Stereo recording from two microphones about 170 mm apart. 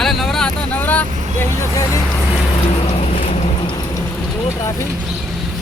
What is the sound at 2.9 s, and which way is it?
Vehicle, 35° left (ahead or behind).